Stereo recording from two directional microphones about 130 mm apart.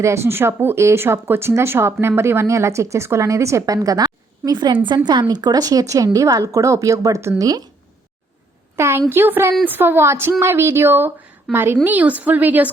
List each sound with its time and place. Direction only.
0.0 s speech: 20° right (ahead or behind)
8.7 s a woman's voice: 20° right (ahead or behind)